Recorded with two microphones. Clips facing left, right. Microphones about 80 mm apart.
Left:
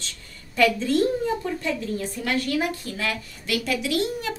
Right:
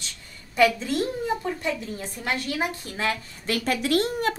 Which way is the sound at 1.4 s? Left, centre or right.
Right.